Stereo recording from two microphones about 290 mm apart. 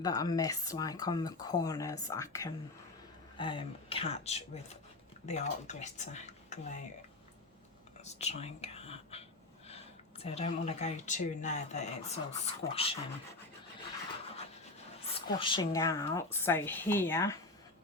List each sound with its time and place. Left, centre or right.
0.0 s speech: centre
8.0 s whispering: left
9.6 s speech: left
15.0 s speech: centre